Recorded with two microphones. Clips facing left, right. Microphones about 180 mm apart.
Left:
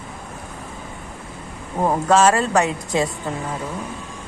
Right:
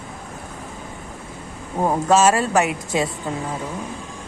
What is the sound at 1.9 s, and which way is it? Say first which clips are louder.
A woman's voice: even; 10° right (ahead or behind).